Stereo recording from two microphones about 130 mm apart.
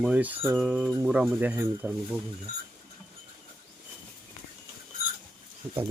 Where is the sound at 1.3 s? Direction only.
15° right (ahead or behind).